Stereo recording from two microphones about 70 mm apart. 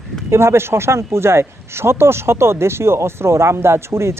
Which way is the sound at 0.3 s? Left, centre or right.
Right.